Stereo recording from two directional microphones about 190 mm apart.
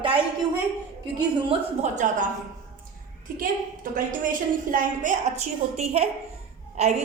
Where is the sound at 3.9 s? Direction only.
45° right (ahead or behind).